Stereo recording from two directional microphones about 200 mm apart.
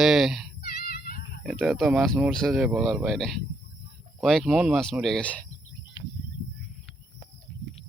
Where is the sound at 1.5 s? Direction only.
Centre (ahead or behind).